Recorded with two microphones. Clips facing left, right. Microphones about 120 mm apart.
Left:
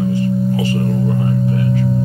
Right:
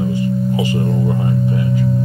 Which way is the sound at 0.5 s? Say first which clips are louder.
Even; 15° right (ahead or behind).